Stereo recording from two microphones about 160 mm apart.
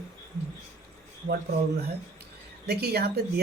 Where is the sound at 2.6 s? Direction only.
85° right.